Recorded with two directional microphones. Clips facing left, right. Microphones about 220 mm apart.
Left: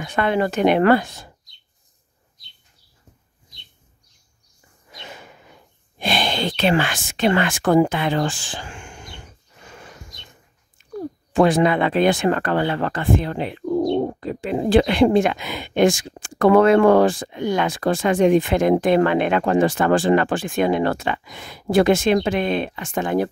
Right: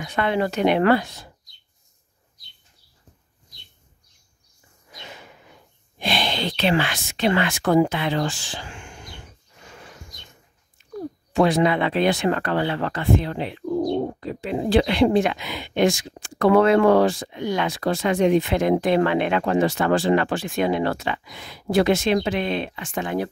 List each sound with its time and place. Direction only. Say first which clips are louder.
0.0 s speech: left 2 dB; 50° left (ahead or behind)
5.9 s speech: left 2 dB; 50° left (ahead or behind)
11.3 s speech: left 2 dB; 50° left (ahead or behind)